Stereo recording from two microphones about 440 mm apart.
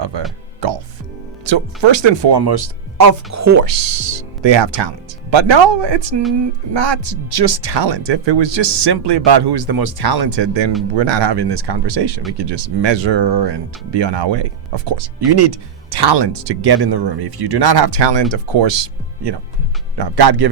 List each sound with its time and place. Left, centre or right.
0.1 s speech: right
0.6 s music: right
1.5 s speech: right
3.3 s speech: right
14.8 s speech: right